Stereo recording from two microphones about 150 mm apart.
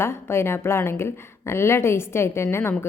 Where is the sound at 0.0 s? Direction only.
15° left (ahead or behind).